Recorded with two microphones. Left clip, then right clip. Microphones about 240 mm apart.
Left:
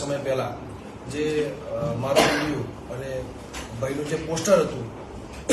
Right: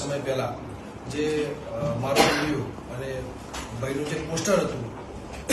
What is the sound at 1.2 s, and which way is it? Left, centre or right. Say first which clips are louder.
Speech: left 1 dB; left.